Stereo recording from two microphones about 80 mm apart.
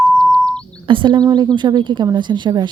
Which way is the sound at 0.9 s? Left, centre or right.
Right.